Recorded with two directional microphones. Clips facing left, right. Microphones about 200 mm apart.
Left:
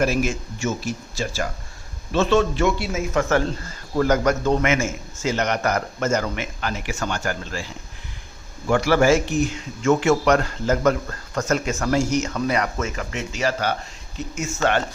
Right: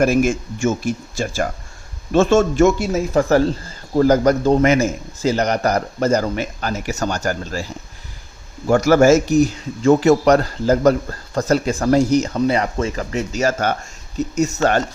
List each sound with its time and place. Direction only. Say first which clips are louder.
0.0 s speech: right 6 dB; 50° right (ahead or behind)